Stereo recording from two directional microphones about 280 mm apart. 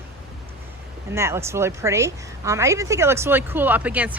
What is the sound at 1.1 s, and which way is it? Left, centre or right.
A woman's voice, centre.